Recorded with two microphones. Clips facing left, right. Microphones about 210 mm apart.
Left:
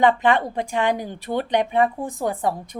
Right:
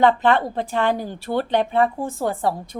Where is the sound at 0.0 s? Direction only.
15° left (ahead or behind).